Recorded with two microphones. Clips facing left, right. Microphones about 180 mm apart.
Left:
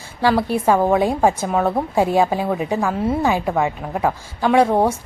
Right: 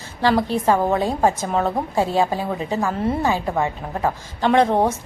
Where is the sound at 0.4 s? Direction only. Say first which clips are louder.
Left 2 dB; 10° left (ahead or behind).